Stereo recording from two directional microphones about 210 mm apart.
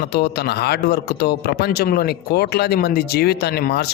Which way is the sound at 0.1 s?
50° left (ahead or behind).